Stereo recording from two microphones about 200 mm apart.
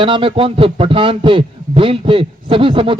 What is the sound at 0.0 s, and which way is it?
A man's voice, 25° right (ahead or behind).